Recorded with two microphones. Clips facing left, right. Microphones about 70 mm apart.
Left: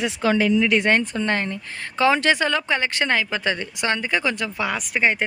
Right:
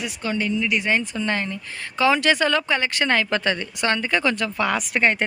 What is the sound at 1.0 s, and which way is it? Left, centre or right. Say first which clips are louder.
Speech: left 2 dB; left.